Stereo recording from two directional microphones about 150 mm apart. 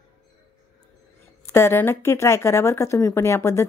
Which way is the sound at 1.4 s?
15° left (ahead or behind).